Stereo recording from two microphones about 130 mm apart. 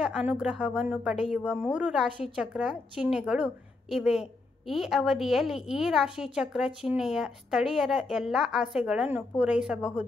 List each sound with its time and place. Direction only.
0.0 s a woman's voice: 5° right (ahead or behind)